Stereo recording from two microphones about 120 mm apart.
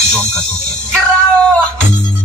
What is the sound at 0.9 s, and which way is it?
Music, 10° left (ahead or behind).